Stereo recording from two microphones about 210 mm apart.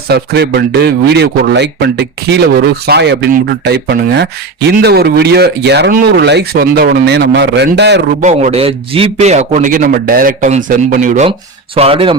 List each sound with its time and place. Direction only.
0.1 s speech: 50° right (ahead or behind)
8.2 s a man's voice: 35° right (ahead or behind)
11.3 s speech: 25° right (ahead or behind)